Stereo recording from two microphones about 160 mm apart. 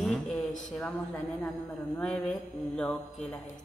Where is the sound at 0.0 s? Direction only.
Centre (ahead or behind).